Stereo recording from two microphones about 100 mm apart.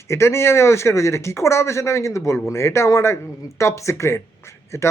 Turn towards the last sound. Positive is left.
turn(degrees=30)  # may be behind; listen again after turning